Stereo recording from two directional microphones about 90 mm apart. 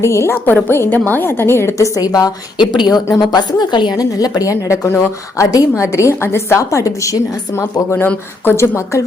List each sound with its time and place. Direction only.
0.0 s a woman's voice: 30° left (ahead or behind)
0.3 s a woman's voice: 15° left (ahead or behind)
2.0 s a woman's voice: 45° left (ahead or behind)
3.9 s a woman's voice: 40° left (ahead or behind)